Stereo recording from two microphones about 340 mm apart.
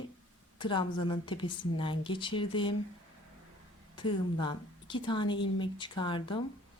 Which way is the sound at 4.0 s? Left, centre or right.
Centre.